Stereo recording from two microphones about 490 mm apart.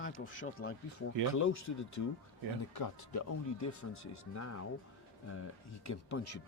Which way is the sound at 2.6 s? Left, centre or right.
Left.